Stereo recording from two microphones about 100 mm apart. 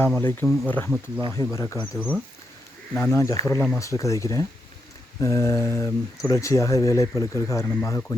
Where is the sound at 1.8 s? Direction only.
15° left (ahead or behind).